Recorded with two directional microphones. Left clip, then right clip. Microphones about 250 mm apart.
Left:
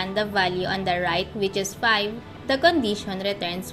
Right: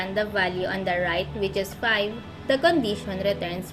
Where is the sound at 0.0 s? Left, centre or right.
Centre.